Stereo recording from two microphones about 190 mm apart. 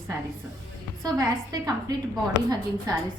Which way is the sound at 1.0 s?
20° right (ahead or behind).